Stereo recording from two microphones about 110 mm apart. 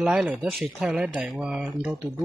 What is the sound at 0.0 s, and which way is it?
Speech, 10° right (ahead or behind).